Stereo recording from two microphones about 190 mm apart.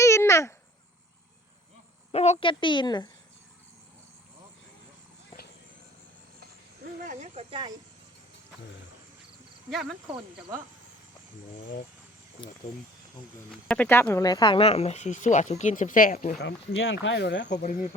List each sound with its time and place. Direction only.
0.0 s babbling: 15° left (ahead or behind)
2.1 s a woman's voice: 35° left (ahead or behind)
7.0 s a sound: 40° right (ahead or behind)
13.5 s speech: 5° left (ahead or behind); by 16.4 s 45° left (ahead or behind)
16.4 s speech: 75° left (ahead or behind)
17.5 s speech: 40° left (ahead or behind)